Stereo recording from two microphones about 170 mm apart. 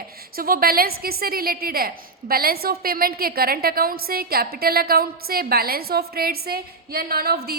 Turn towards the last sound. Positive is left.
turn(degrees=-65)  # may be behind; listen again after turning